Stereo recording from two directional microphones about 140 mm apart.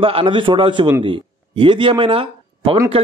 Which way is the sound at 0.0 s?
40° right (ahead or behind).